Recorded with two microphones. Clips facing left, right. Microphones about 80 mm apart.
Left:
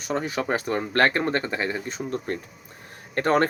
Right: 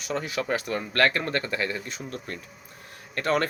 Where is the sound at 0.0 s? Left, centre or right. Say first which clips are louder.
Left 3 dB; left.